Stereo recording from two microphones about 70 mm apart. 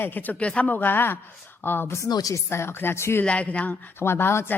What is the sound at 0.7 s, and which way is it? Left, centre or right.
A woman's voice, left.